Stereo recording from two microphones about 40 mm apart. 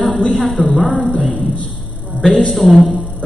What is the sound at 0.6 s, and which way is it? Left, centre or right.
Speech, left.